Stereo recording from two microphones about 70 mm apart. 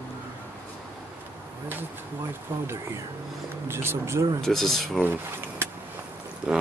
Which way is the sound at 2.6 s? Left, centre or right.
Right.